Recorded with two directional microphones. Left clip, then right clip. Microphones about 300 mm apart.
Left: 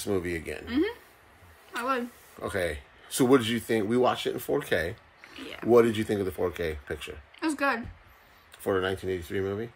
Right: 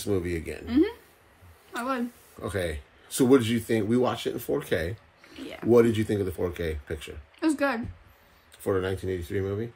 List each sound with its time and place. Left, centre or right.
0.0 s speech: centre
0.7 s speech: centre
2.4 s speech: centre
5.4 s speech: centre
5.7 s speech: centre
7.3 s speech: centre
8.6 s speech: centre